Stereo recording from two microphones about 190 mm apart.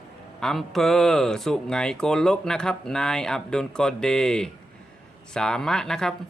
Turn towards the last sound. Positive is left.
turn(degrees=5)  # may be behind; listen again after turning